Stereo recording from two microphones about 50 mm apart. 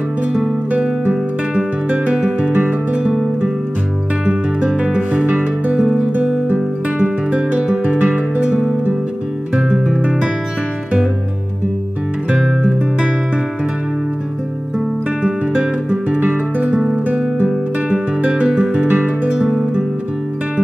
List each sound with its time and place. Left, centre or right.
1.9 s music: right
4.3 s music: right
15.2 s guitar: centre
16.9 s music: right
17.5 s guitar: centre
18.9 s music: right